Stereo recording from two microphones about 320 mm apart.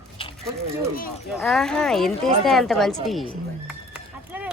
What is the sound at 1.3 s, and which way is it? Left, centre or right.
Speech, centre.